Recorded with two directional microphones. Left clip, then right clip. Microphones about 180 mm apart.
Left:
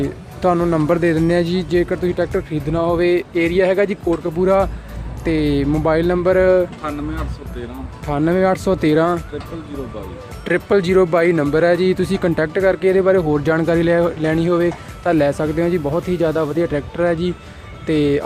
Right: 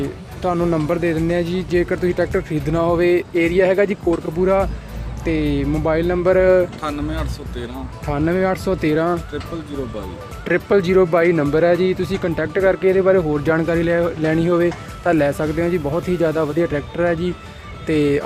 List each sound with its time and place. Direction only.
0.6 s speech: 25° left (ahead or behind)
1.8 s speech: 5° left (ahead or behind)
6.8 s speech: 35° right (ahead or behind)
8.0 s speech: 15° left (ahead or behind)
10.4 s speech: 20° left (ahead or behind)